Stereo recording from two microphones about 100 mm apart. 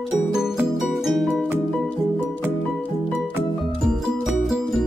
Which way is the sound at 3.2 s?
Centre (ahead or behind).